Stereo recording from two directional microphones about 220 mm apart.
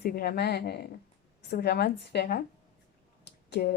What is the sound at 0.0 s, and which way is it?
A woman's voice, 40° left (ahead or behind).